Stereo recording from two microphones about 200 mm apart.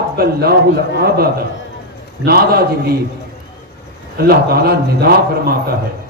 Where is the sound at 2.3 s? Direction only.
50° right (ahead or behind).